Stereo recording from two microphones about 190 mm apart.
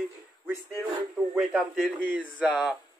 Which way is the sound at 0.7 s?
Centre (ahead or behind).